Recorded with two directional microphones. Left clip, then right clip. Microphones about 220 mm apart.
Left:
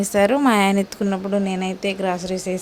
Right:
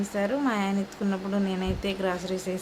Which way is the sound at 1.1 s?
30° left (ahead or behind).